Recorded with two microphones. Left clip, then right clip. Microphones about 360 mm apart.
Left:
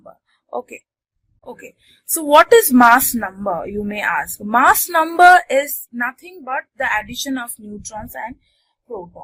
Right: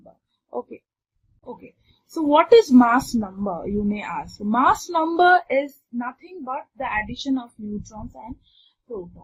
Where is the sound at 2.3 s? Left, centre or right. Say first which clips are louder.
Left 4 dB; left.